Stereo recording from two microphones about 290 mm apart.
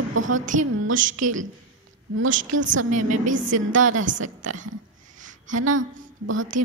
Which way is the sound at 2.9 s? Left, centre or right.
Right.